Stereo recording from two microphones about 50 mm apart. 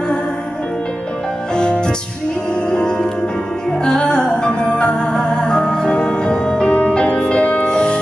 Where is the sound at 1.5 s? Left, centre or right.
Centre.